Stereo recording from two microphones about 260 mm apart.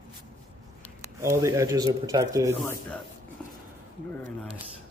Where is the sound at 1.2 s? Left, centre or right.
Centre.